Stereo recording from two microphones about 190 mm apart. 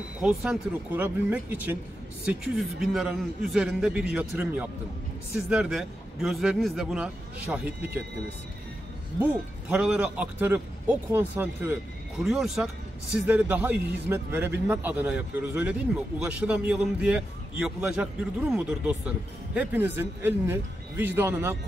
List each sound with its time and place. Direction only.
0.2 s a man's voice: centre (ahead or behind)
9.2 s speech: 5° right (ahead or behind)
12.2 s a man's voice: centre (ahead or behind)